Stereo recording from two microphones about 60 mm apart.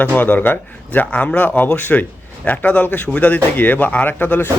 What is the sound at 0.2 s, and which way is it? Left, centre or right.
Speech, left.